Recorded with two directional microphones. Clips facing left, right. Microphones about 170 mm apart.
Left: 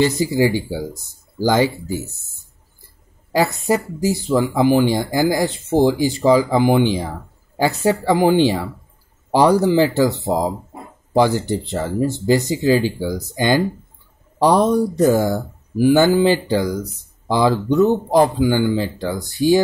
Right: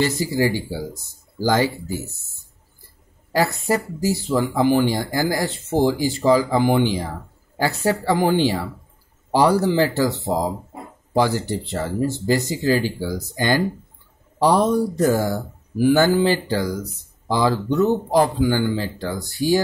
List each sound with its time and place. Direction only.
0.0 s speech: 20° left (ahead or behind)
3.3 s speech: 15° left (ahead or behind)